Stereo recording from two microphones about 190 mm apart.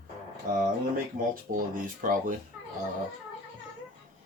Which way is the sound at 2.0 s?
45° right (ahead or behind).